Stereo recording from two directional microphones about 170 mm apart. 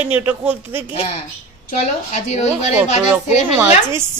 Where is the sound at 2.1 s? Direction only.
40° left (ahead or behind).